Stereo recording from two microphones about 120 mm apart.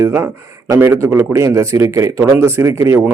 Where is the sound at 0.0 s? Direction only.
20° right (ahead or behind).